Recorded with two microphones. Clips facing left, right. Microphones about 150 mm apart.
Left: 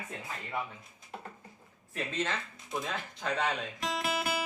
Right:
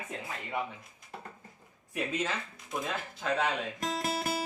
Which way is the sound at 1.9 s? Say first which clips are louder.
Right 1 dB; 10° right (ahead or behind).